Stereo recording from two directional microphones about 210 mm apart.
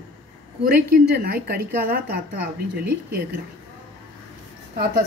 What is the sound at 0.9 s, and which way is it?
A woman's voice, 50° right (ahead or behind).